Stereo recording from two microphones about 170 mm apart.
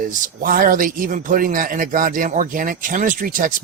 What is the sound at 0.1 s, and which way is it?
A man's voice, 55° right (ahead or behind).